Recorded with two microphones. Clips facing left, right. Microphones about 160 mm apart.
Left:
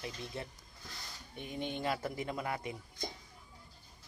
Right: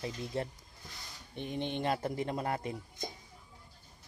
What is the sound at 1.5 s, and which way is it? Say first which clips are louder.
Speech: right 3 dB; 25° right (ahead or behind).